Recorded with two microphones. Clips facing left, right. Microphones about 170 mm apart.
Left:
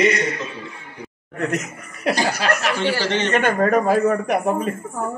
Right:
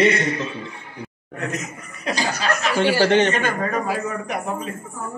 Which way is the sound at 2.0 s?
65° left (ahead or behind).